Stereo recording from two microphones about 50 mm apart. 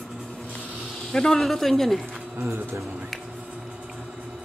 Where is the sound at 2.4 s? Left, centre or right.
Right.